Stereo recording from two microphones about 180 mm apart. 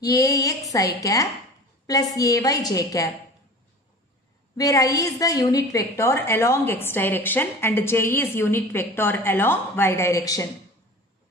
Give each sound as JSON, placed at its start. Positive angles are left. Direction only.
{"t": 0.0, "sound": "a woman's voice", "side_deg": 20}
{"t": 4.6, "sound": "a woman's voice", "side_deg": 20}